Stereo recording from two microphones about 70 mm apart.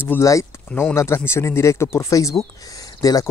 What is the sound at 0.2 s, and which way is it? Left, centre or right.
Speech, left.